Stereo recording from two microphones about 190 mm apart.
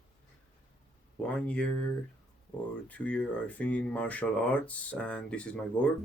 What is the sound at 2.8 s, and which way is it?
Speech, 10° left (ahead or behind).